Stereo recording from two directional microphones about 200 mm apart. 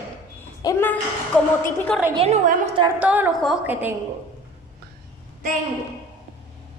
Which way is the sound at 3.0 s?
10° right (ahead or behind).